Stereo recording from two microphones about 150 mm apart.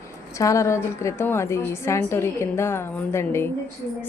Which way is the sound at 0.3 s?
20° left (ahead or behind).